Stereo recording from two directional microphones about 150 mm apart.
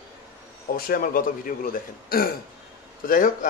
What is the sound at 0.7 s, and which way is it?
Speech, 80° left.